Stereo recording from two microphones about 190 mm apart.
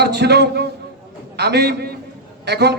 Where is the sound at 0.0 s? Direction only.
60° right (ahead or behind).